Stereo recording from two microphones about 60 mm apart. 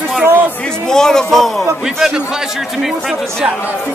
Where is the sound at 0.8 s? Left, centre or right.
Centre.